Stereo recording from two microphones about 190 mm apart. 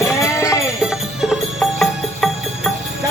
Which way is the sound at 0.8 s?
Centre (ahead or behind).